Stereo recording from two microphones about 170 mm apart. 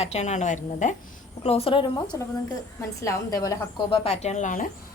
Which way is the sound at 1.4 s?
35° left (ahead or behind).